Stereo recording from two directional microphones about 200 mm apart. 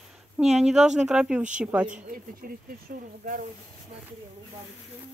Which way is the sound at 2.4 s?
45° right (ahead or behind).